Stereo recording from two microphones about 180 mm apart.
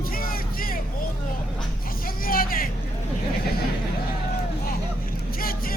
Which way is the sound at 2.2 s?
55° left (ahead or behind).